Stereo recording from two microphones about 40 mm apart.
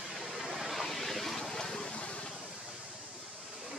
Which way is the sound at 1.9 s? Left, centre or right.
Left.